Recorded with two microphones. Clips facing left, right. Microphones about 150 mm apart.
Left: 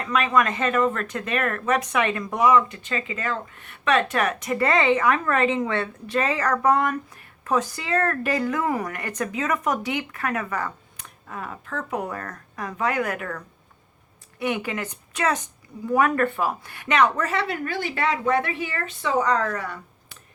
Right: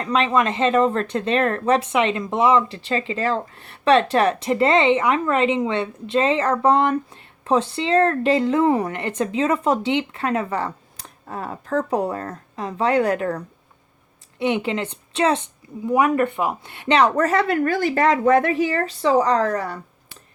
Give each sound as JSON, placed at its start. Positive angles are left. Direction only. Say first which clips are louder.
{"t": 0.0, "sound": "speech", "louder": "right 2 dB", "side_deg": -30}
{"t": 15.9, "sound": "speech", "louder": "right 3 dB", "side_deg": -15}
{"t": 17.2, "sound": "speech", "louder": "right 7 dB", "side_deg": -45}